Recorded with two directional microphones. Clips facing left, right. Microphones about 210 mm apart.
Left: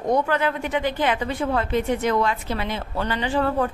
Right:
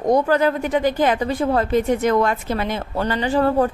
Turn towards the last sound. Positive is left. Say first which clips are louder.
# right 5 dB
turn(degrees=-40)  # may be behind; listen again after turning